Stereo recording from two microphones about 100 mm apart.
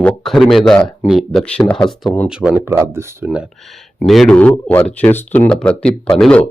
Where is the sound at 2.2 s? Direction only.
10° right (ahead or behind).